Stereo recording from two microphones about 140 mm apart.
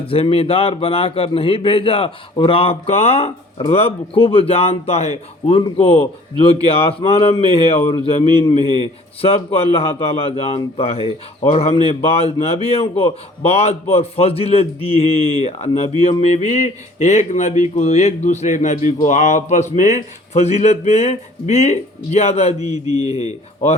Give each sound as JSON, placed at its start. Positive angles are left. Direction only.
{"t": 0.1, "sound": "a man's voice", "side_deg": 40}
{"t": 8.6, "sound": "a man's voice", "side_deg": -35}
{"t": 9.2, "sound": "a man's voice", "side_deg": 45}
{"t": 23.0, "sound": "speech", "side_deg": -25}